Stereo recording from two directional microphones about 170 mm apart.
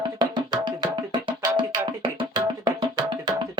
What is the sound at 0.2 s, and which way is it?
Music, 25° right (ahead or behind).